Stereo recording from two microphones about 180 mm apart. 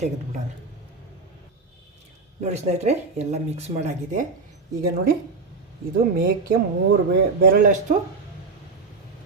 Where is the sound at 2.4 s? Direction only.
40° right (ahead or behind).